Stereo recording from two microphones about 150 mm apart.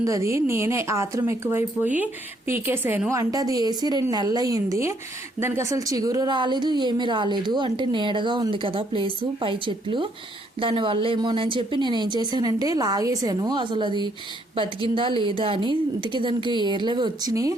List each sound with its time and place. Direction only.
0.0 s speech: 20° right (ahead or behind)